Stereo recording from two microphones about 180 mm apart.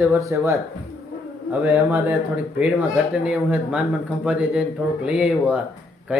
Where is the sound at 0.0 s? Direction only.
15° right (ahead or behind).